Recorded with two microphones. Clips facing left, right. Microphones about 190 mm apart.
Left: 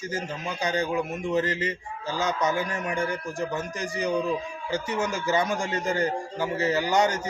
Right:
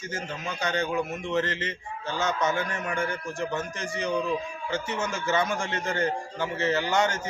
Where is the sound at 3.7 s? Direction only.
35° left (ahead or behind).